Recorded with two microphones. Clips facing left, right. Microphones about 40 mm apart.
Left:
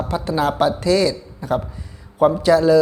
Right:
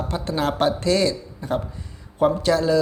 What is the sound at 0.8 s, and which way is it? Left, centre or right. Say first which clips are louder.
Speech: left 3 dB; centre.